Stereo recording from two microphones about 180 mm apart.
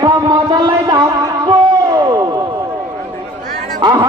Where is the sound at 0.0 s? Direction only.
25° right (ahead or behind).